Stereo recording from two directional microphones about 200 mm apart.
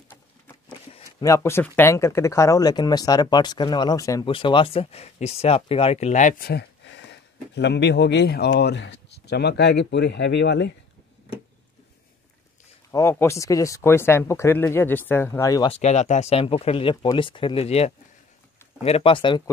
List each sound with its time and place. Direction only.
1.2 s speech: 15° left (ahead or behind); by 10.7 s 60° left (ahead or behind)
12.9 s speech: 15° left (ahead or behind)
15.7 s speech: 35° left (ahead or behind)